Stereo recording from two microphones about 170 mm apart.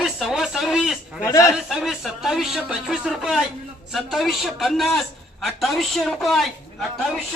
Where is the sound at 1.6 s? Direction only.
Centre (ahead or behind).